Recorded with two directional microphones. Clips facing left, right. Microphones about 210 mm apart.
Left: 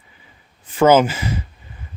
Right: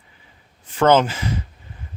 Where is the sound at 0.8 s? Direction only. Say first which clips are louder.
Left 3 dB; 10° left (ahead or behind).